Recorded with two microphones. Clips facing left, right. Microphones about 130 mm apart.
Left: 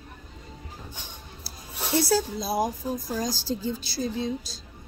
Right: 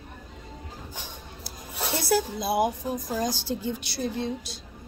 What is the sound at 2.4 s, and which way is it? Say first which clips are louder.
A woman's voice: right 2 dB; 55° right (ahead or behind).